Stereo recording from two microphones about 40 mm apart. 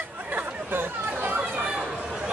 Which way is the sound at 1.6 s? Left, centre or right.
Right.